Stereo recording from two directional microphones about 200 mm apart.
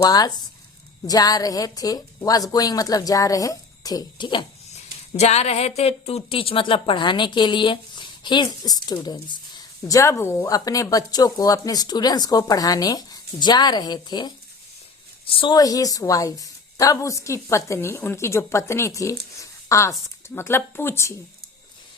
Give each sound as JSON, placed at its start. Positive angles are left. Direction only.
{"t": 0.0, "sound": "a woman's voice", "side_deg": 20}